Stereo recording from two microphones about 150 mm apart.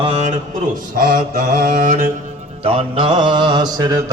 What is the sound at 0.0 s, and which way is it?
Speech, 40° right (ahead or behind).